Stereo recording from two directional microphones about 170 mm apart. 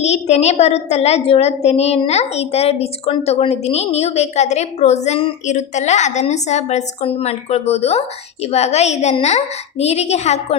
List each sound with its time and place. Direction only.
0.0 s a woman's voice: 40° left (ahead or behind)